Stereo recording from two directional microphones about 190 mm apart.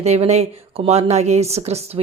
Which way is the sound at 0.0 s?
35° right (ahead or behind).